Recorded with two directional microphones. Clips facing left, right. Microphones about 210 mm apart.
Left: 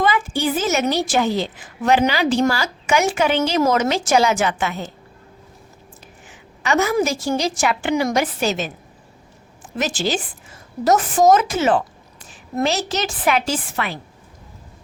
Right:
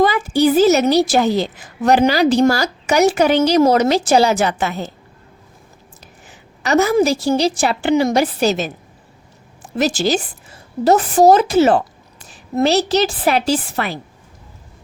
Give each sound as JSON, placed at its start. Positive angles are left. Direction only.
{"t": 0.0, "sound": "a woman's voice", "side_deg": -40}
{"t": 6.2, "sound": "a sound", "side_deg": -40}
{"t": 6.9, "sound": "a woman's voice", "side_deg": -35}
{"t": 9.7, "sound": "a woman's voice", "side_deg": -40}